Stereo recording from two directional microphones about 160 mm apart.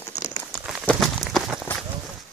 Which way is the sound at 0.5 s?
Centre (ahead or behind).